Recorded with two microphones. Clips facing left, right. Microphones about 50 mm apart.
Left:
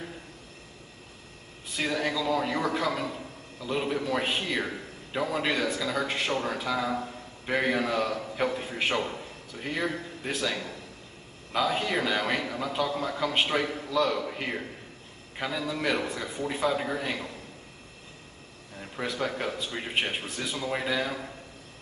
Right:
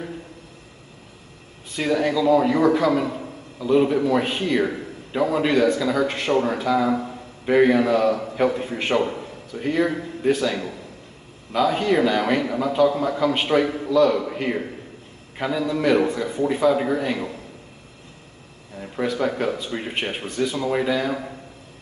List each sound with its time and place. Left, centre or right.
1.8 s a man's voice: centre
4.6 s a man's voice: centre
8.9 s a man's voice: centre
9.5 s a man's voice: centre
18.8 s a man's voice: centre